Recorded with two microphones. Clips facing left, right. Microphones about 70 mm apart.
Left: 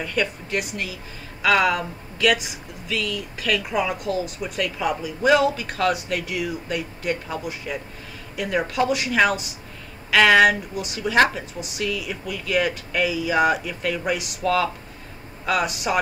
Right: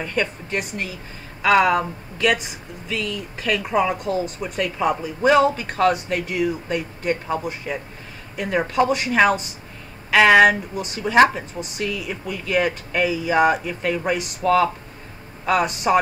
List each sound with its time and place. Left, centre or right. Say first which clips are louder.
0.0 s speech: right 1 dB; right
1.4 s speech: right 3 dB; right
3.9 s speech: right 2 dB; right
10.1 s speech: right 2 dB; centre
10.8 s speech: right 1 dB; right
11.6 s speech: even; centre; by 13.4 s right
13.4 s speech: right 3 dB; right
14.1 s speech: right 3 dB; right
14.4 s speech: right 4 dB; centre
15.5 s speech: right 5 dB; right